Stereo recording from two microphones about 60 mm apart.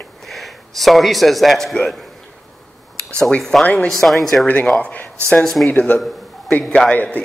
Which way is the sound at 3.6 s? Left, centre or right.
Left.